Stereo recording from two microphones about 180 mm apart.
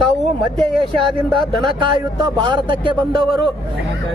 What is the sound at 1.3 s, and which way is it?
Speech, 25° right (ahead or behind).